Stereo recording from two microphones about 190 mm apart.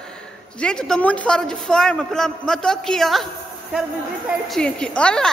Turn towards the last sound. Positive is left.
turn(degrees=5)  # may be behind; listen again after turning